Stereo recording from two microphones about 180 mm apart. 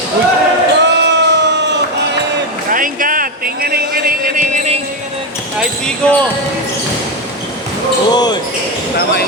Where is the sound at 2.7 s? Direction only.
50° right (ahead or behind).